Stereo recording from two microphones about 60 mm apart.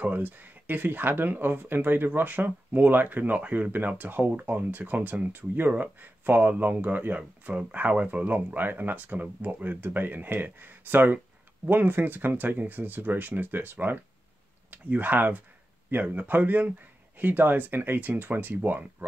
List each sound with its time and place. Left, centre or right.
0.0 s speech: right